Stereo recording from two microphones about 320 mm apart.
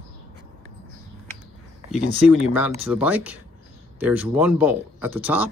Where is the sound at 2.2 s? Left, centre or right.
Centre.